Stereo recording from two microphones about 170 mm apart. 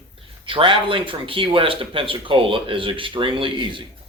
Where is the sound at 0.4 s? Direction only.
30° right (ahead or behind).